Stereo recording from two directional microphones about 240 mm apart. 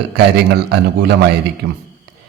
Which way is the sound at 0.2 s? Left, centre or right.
Right.